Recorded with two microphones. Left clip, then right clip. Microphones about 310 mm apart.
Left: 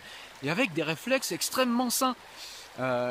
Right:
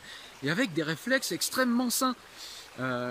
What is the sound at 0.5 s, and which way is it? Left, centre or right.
Speech, centre.